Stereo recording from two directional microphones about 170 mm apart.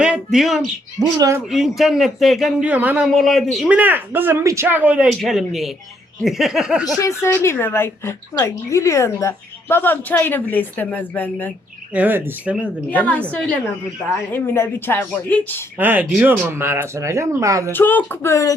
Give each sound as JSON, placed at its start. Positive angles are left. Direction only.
{"t": 0.0, "sound": "a sound", "side_deg": -5}
{"t": 0.9, "sound": "speech", "side_deg": -20}
{"t": 1.5, "sound": "speech", "side_deg": 0}
{"t": 7.0, "sound": "a woman's voice", "side_deg": 15}
{"t": 11.9, "sound": "speech", "side_deg": -10}
{"t": 12.9, "sound": "a woman's voice", "side_deg": 10}
{"t": 14.3, "sound": "a woman's voice", "side_deg": 15}
{"t": 15.8, "sound": "speech", "side_deg": -10}
{"t": 17.7, "sound": "a woman's voice", "side_deg": 10}